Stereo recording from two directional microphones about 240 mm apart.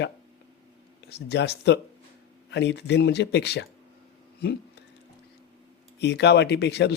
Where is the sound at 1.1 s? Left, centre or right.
Left.